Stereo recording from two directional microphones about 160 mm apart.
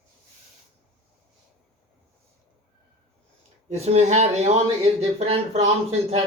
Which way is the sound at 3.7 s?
40° right (ahead or behind).